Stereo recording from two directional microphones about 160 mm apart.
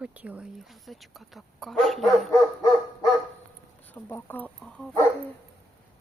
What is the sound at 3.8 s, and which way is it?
Speech, 10° left (ahead or behind).